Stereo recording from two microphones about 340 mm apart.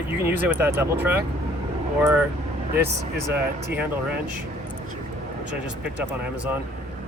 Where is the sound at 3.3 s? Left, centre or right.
Centre.